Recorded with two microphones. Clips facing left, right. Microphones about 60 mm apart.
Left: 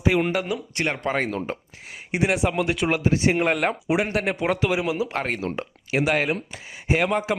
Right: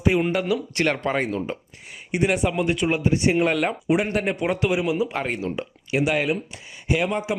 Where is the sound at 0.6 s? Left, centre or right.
Centre.